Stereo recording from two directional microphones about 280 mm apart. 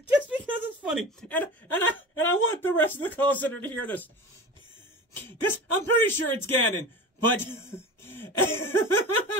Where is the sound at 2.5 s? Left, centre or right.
Centre.